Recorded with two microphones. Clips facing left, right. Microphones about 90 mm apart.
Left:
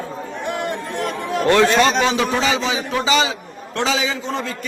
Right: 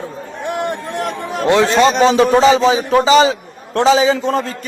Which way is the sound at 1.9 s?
40° right (ahead or behind).